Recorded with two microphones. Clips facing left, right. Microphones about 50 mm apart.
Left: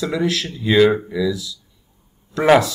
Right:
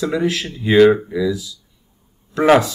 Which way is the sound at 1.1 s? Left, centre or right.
Right.